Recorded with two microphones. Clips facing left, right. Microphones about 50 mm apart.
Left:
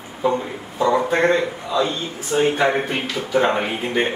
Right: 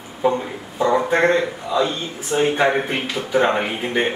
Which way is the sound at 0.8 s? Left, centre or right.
Centre.